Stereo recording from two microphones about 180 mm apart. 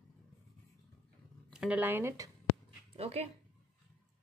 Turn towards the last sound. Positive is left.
turn(degrees=-35)  # may be behind; listen again after turning